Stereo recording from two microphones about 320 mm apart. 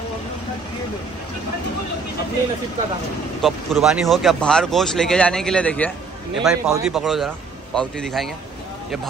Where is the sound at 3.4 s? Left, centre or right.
Centre.